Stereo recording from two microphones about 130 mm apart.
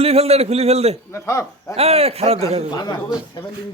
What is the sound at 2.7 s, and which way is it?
Speech, 35° left (ahead or behind).